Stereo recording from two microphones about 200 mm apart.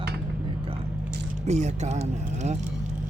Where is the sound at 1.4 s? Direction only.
35° right (ahead or behind).